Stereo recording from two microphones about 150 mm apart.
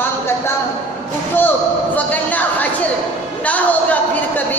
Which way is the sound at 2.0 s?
10° left (ahead or behind).